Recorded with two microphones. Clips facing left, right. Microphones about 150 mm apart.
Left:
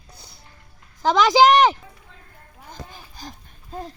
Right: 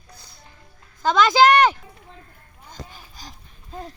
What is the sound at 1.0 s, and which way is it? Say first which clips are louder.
Speech: left 1 dB; 10° left (ahead or behind).